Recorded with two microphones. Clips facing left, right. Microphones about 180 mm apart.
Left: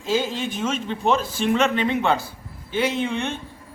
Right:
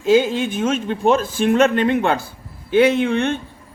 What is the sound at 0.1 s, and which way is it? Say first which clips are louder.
Speech: right 8 dB; 55° right (ahead or behind).